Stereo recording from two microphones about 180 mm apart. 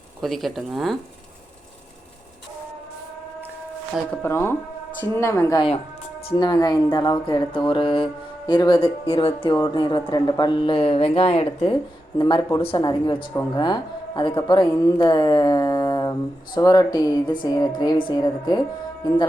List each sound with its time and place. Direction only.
0.2 s speech: centre (ahead or behind)
3.9 s speech: 10° left (ahead or behind)